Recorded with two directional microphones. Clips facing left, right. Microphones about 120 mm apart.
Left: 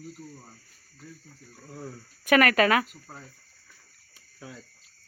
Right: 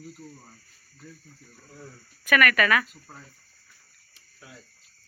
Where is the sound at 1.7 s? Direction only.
60° left (ahead or behind).